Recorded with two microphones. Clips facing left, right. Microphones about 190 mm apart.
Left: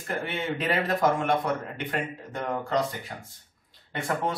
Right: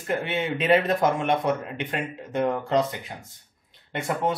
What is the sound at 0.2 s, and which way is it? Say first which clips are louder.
A man's voice: right 3 dB; 20° right (ahead or behind).